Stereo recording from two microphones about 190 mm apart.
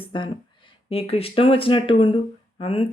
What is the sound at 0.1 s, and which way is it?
Speech, 25° left (ahead or behind).